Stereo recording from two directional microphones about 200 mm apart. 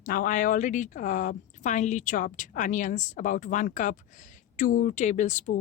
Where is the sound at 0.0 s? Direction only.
45° left (ahead or behind).